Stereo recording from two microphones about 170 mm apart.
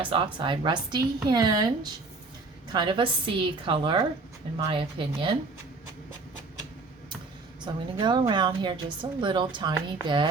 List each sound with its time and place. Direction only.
0.0 s a woman's voice: 30° right (ahead or behind)
7.6 s a woman's voice: 25° right (ahead or behind)